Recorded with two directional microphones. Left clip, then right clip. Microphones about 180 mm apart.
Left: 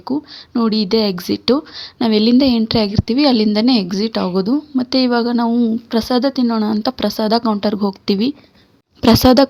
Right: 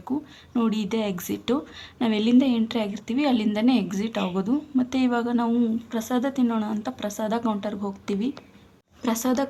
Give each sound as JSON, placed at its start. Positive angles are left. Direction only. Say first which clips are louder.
{"t": 0.5, "sound": "a woman's voice", "louder": "left 10 dB", "side_deg": 40}
{"t": 6.0, "sound": "a woman's voice", "louder": "left 9 dB", "side_deg": 50}